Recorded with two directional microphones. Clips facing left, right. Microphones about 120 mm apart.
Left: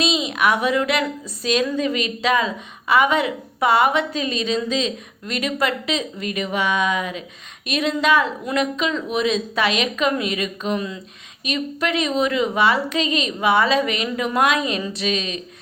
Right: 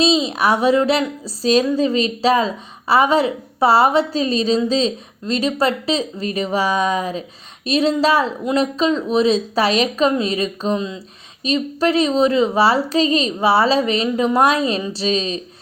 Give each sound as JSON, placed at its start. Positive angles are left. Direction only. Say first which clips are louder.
{"t": 0.0, "sound": "a woman's voice", "louder": "right 4 dB", "side_deg": -30}